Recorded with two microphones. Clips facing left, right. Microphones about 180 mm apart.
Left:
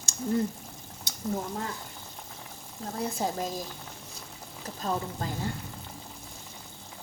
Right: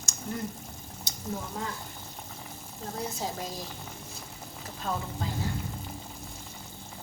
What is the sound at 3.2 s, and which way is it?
Speech, 50° left (ahead or behind).